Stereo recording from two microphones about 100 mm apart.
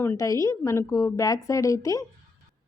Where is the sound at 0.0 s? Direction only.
25° left (ahead or behind).